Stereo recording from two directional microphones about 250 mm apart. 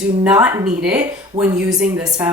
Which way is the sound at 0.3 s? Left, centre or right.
Centre.